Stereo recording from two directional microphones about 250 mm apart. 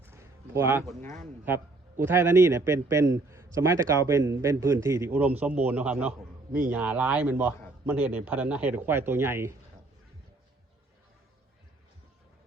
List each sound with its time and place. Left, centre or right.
0.0 s a sound: centre
1.0 s speech: right
1.5 s a man's voice: centre